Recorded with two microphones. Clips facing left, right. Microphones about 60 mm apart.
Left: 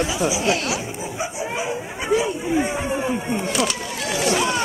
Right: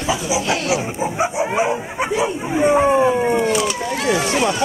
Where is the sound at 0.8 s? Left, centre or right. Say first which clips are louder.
Right 7 dB; right.